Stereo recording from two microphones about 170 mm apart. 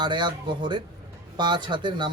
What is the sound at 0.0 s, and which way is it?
Speech, 25° right (ahead or behind).